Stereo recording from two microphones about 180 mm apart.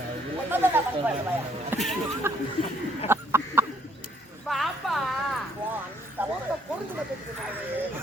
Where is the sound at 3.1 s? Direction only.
15° right (ahead or behind).